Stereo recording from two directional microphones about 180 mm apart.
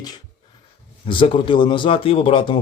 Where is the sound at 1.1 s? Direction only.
30° left (ahead or behind).